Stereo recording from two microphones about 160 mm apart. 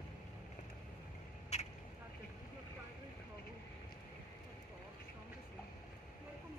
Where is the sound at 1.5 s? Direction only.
45° left (ahead or behind).